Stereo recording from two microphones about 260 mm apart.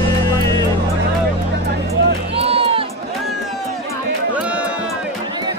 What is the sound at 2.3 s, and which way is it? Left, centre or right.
Music, right.